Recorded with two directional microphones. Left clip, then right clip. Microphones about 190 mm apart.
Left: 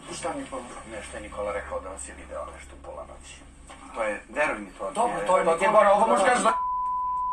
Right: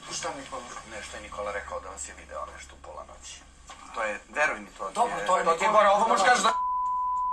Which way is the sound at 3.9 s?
40° right (ahead or behind).